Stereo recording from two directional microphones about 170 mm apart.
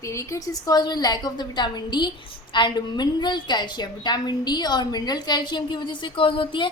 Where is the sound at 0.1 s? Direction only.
15° left (ahead or behind).